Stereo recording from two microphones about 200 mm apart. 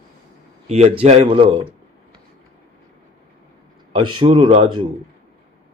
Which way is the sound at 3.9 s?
25° right (ahead or behind).